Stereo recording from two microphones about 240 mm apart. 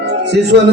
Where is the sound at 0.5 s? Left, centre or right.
Right.